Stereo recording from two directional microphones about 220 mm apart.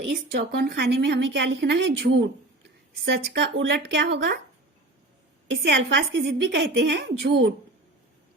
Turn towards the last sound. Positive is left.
turn(degrees=-50)  # may be behind; listen again after turning